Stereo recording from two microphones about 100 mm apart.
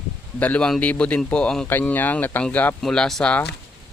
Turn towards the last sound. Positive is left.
turn(degrees=5)  # may be behind; listen again after turning